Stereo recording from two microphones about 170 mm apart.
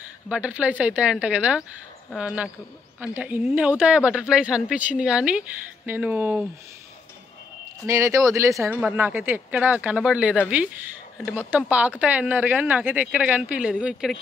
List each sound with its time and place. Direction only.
0.3 s speech: 10° right (ahead or behind)
7.8 s speech: 15° right (ahead or behind)